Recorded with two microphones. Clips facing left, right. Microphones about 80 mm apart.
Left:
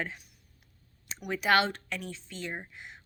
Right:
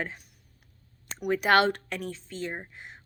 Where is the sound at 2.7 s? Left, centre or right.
Right.